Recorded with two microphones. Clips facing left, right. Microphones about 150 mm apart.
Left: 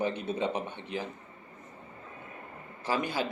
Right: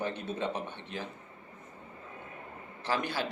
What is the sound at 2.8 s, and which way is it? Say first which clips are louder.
Speech: left 2 dB; 10° left (ahead or behind).